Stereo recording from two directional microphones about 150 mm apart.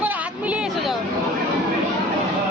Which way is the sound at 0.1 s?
10° right (ahead or behind).